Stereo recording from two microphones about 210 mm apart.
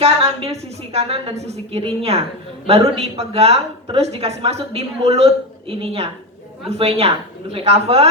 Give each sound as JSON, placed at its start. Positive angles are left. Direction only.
{"t": 0.0, "sound": "a woman's voice", "side_deg": -30}